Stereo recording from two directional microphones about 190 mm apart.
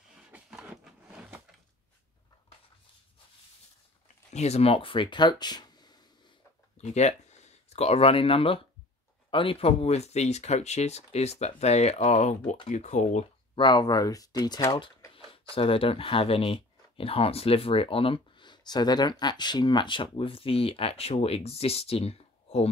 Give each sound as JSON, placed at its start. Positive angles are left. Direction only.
{"t": 0.1, "sound": "a sound", "side_deg": -5}
{"t": 4.3, "sound": "speech", "side_deg": 35}
{"t": 6.8, "sound": "speech", "side_deg": 35}
{"t": 13.6, "sound": "speech", "side_deg": 25}